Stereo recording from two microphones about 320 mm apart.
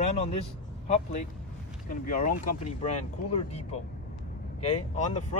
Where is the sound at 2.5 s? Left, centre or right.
Left.